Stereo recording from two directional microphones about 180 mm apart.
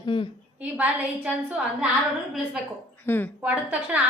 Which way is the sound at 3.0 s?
10° left (ahead or behind).